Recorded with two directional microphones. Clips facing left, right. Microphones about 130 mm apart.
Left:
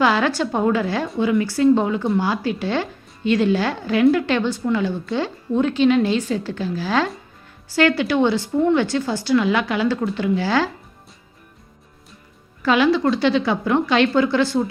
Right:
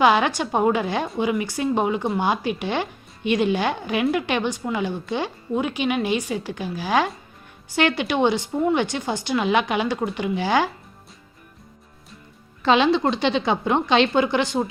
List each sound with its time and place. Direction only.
0.0 s a woman's voice: 20° right (ahead or behind)
12.6 s a woman's voice: 25° right (ahead or behind)